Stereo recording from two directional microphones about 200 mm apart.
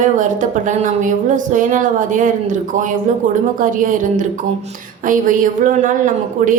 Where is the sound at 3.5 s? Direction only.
40° right (ahead or behind).